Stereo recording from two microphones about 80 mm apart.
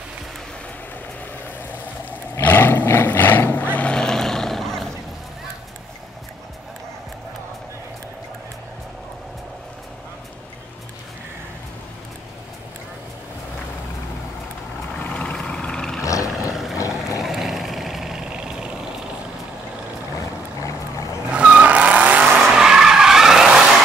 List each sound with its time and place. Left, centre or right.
2.4 s vehicle: left; by 4.8 s centre
15.0 s vehicle: centre
16.0 s a sound: left
16.7 s vehicle: left
17.2 s vehicle: centre
21.3 s vehicle: centre